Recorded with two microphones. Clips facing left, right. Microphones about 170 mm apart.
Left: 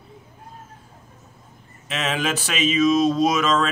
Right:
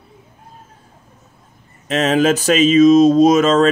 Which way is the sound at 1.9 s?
40° right (ahead or behind).